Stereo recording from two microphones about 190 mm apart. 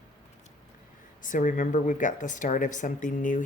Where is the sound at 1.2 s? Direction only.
40° left (ahead or behind).